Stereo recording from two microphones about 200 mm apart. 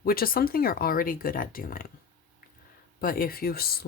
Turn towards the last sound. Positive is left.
turn(degrees=50)  # may be behind; listen again after turning